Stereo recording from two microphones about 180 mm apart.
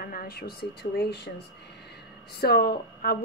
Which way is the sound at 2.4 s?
60° left (ahead or behind).